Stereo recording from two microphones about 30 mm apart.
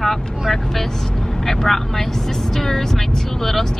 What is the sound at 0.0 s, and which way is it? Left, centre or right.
Vehicle, centre.